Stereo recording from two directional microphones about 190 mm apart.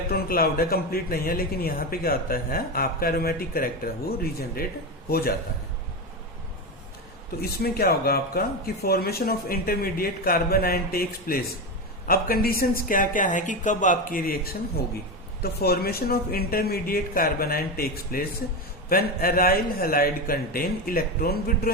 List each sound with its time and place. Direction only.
0.1 s speech: 50° left (ahead or behind)
7.6 s speech: 55° left (ahead or behind)